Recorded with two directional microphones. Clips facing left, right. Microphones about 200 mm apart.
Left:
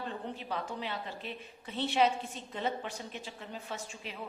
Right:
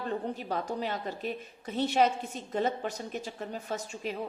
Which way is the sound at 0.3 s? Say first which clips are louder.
Right 5 dB; 45° right (ahead or behind).